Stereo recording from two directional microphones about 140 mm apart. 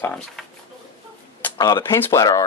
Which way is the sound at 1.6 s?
25° left (ahead or behind).